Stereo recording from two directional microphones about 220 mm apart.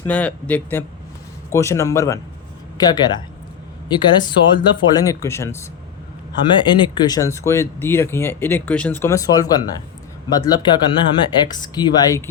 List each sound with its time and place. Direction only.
0.0 s speech: 5° left (ahead or behind)